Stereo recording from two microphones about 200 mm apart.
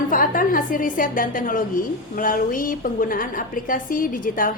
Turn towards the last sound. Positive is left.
turn(degrees=45)  # may be behind; listen again after turning